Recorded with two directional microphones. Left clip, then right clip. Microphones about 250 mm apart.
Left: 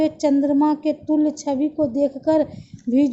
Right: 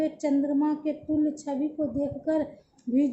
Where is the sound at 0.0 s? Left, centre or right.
Left.